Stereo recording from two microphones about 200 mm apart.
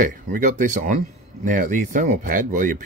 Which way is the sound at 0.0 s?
40° right (ahead or behind).